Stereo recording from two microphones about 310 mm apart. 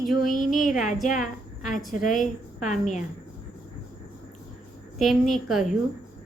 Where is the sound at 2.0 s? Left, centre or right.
Left.